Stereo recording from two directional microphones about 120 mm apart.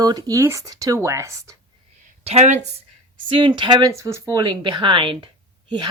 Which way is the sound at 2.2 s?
65° right (ahead or behind).